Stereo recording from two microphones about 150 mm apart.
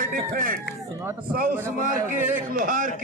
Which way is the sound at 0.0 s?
65° right (ahead or behind).